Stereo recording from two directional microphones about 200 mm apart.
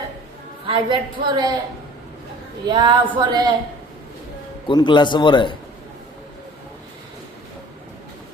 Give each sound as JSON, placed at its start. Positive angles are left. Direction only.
{"t": 0.7, "sound": "a woman's voice", "side_deg": -20}
{"t": 2.6, "sound": "a woman's voice", "side_deg": -20}
{"t": 4.7, "sound": "a man's voice", "side_deg": 20}